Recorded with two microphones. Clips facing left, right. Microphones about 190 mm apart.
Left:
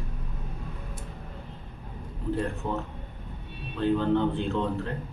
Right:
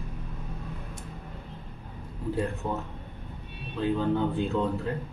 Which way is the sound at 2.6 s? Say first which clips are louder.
Left 1 dB; 10° right (ahead or behind).